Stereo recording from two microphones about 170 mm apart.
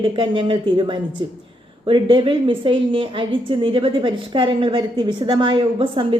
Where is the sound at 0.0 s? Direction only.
30° right (ahead or behind).